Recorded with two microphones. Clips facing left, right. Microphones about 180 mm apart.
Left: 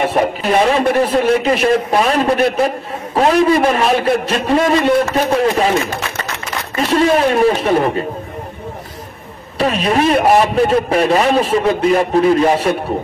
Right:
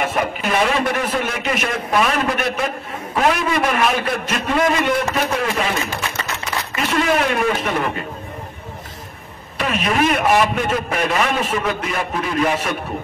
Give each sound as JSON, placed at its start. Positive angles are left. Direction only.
{"t": 0.0, "sound": "a man's voice", "side_deg": 35}
{"t": 6.9, "sound": "a man's voice", "side_deg": 30}
{"t": 9.6, "sound": "a man's voice", "side_deg": 35}